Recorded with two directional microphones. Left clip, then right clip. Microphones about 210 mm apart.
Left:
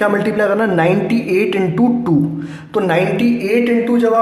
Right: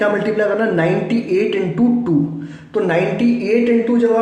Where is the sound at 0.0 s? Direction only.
25° left (ahead or behind).